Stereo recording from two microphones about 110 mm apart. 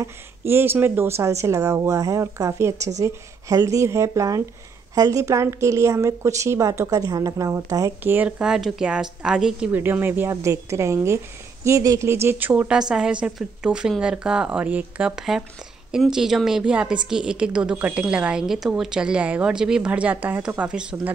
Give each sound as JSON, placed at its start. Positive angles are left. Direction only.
{"t": 0.0, "sound": "a woman's voice", "side_deg": -20}
{"t": 8.4, "sound": "a woman's voice", "side_deg": -5}
{"t": 9.7, "sound": "a woman's voice", "side_deg": -20}